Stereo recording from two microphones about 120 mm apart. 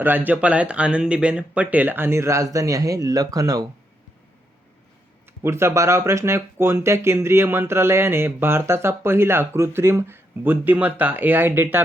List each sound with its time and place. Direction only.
0.0 s speech: 15° right (ahead or behind); by 3.7 s 30° right (ahead or behind)
5.4 s speech: 20° right (ahead or behind)